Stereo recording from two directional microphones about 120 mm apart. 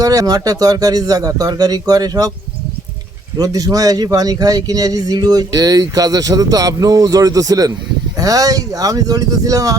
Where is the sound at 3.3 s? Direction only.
30° right (ahead or behind).